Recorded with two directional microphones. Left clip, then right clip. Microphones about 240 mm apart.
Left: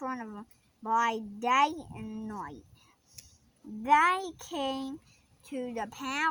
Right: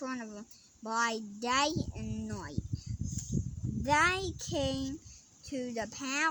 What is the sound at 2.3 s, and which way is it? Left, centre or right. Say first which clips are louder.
Speech: left 4 dB; left.